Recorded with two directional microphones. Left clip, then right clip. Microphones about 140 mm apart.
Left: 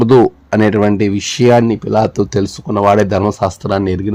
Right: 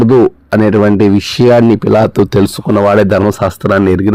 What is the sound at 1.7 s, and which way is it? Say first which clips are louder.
Speech: right 5 dB; 50° right (ahead or behind).